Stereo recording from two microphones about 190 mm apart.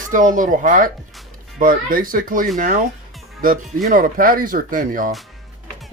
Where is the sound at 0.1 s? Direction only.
45° right (ahead or behind).